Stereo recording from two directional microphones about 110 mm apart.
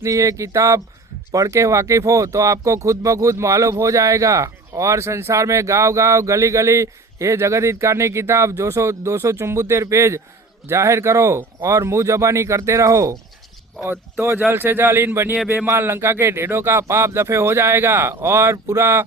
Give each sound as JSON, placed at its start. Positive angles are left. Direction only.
{"t": 0.0, "sound": "speech", "side_deg": -30}